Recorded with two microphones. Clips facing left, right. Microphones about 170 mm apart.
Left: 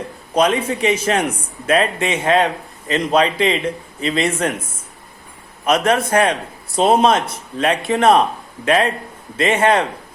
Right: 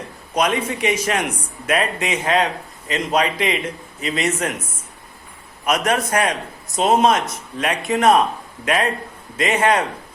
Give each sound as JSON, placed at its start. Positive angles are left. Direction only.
{"t": 0.3, "sound": "a man's voice", "side_deg": 30}
{"t": 5.6, "sound": "a man's voice", "side_deg": 30}